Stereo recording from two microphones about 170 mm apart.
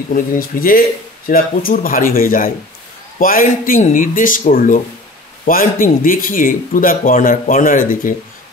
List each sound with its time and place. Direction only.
0.1 s speech: 55° left (ahead or behind)